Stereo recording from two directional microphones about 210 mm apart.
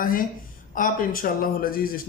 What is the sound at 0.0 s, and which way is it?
Speech, 40° left (ahead or behind).